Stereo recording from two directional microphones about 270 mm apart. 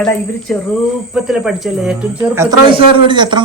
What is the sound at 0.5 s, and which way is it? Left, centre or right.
A man's voice, centre.